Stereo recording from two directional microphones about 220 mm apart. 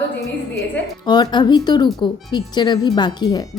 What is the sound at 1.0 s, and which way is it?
Speech, 20° left (ahead or behind).